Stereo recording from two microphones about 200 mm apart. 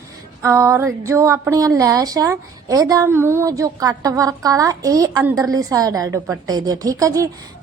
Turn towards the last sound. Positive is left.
turn(degrees=-15)  # may be behind; listen again after turning